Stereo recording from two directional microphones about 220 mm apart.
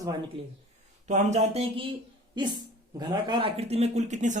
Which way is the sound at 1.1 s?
30° right (ahead or behind).